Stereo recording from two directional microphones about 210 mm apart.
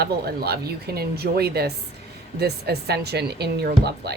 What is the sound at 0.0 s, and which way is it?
A woman's voice, 50° right (ahead or behind).